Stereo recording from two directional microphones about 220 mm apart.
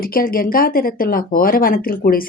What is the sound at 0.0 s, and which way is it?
Speech, 40° left (ahead or behind).